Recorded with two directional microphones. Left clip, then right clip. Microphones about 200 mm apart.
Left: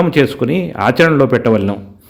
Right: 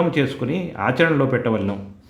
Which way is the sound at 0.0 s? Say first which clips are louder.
Left 8 dB; 30° left (ahead or behind).